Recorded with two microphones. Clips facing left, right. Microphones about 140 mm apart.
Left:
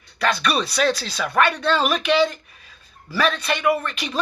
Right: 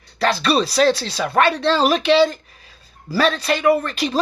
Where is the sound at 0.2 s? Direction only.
35° right (ahead or behind).